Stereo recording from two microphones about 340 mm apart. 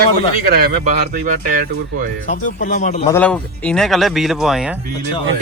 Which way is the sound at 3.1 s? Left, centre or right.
Centre.